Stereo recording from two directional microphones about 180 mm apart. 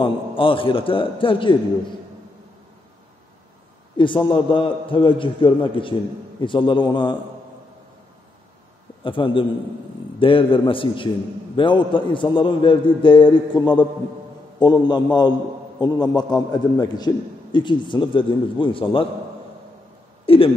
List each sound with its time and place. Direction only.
0.0 s a man's voice: 30° left (ahead or behind)
3.9 s a man's voice: 25° left (ahead or behind)
9.0 s a man's voice: 30° left (ahead or behind)
20.2 s speech: 30° left (ahead or behind)